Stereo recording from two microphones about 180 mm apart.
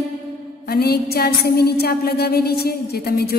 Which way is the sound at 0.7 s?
60° left (ahead or behind).